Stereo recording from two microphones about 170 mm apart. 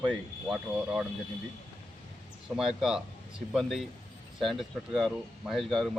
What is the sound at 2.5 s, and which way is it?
Speech, 5° right (ahead or behind).